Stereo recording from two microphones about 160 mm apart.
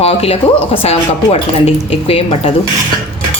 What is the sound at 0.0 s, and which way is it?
Speech, 40° left (ahead or behind).